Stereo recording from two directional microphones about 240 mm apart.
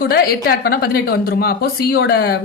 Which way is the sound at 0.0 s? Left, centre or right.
Left.